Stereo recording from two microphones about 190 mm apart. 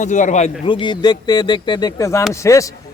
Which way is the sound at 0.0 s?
40° left (ahead or behind).